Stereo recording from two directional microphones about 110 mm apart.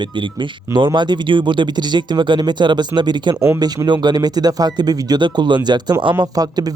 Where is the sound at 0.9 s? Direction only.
45° right (ahead or behind).